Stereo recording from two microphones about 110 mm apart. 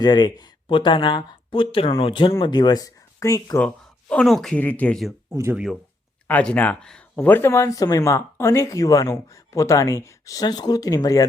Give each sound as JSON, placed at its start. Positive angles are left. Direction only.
{"t": 0.0, "sound": "speech", "side_deg": 40}
{"t": 4.1, "sound": "speech", "side_deg": 5}
{"t": 4.6, "sound": "speech", "side_deg": 15}
{"t": 5.3, "sound": "speech", "side_deg": -25}
{"t": 6.2, "sound": "speech", "side_deg": 15}